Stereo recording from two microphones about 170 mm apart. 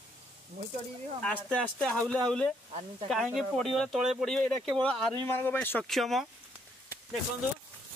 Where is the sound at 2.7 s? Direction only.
35° right (ahead or behind).